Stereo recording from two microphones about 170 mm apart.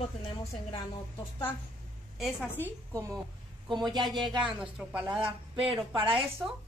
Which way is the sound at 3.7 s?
25° right (ahead or behind).